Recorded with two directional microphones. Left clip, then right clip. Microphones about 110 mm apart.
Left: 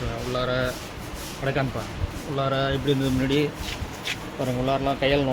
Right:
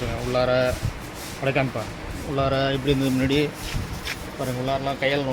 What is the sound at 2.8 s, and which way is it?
Speech, 10° right (ahead or behind).